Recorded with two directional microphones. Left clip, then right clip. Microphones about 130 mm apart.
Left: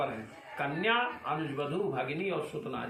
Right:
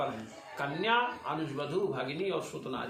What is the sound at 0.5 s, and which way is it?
A man's voice, 25° right (ahead or behind).